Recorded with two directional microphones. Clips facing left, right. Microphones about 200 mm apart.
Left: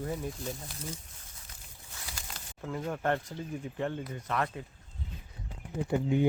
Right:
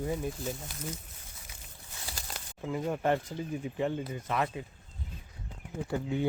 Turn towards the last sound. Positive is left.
turn(degrees=15)  # may be behind; listen again after turning